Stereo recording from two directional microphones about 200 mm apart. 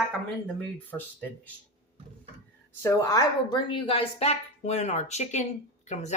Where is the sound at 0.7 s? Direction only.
10° left (ahead or behind).